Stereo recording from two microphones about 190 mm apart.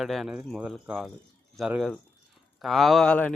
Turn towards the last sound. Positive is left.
turn(degrees=5)  # may be behind; listen again after turning